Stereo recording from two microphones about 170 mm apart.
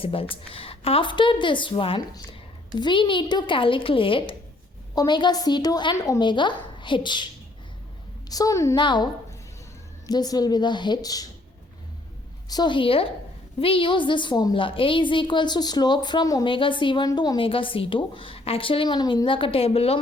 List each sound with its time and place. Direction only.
0.0 s a woman's voice: 35° left (ahead or behind)
8.3 s a woman's voice: 20° left (ahead or behind)
10.1 s a woman's voice: 25° left (ahead or behind)
12.5 s a woman's voice: 25° left (ahead or behind)